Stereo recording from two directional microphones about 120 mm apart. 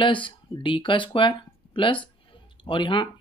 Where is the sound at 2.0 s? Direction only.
45° left (ahead or behind).